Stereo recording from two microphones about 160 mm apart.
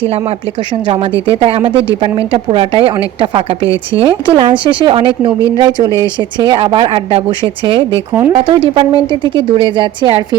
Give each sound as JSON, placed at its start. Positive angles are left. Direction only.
{"t": 0.9, "sound": "speech", "side_deg": -30}
{"t": 8.1, "sound": "speech", "side_deg": -10}
{"t": 8.4, "sound": "speech", "side_deg": -35}